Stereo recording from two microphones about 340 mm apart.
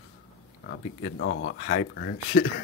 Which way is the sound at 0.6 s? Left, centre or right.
Left.